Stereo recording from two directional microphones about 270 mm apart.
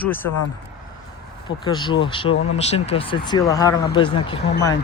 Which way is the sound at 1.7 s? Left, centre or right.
Centre.